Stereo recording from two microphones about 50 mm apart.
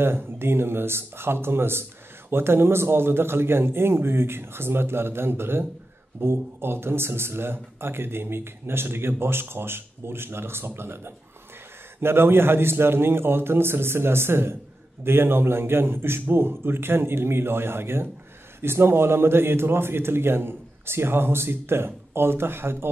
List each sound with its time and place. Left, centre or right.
0.0 s speech: right